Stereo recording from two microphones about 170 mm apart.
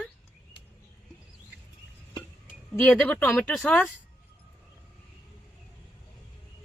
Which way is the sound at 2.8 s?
5° left (ahead or behind).